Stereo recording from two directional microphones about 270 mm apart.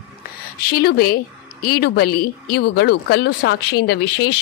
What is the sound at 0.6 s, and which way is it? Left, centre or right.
Speech, left.